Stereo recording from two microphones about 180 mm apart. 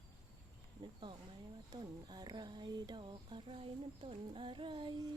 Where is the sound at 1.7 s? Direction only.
20° right (ahead or behind).